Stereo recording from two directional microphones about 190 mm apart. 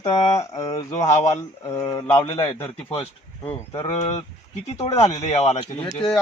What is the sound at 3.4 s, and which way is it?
Speech, 10° left (ahead or behind).